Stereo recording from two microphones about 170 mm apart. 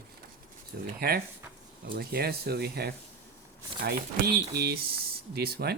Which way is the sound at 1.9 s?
65° right (ahead or behind).